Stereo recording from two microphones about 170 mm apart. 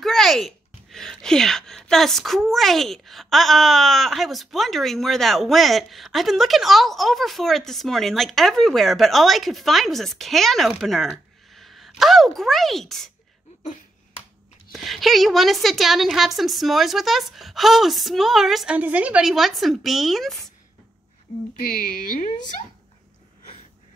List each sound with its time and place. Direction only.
0.0 s speech: centre (ahead or behind)
14.7 s speech: centre (ahead or behind)
21.8 s a woman's voice: 55° left (ahead or behind)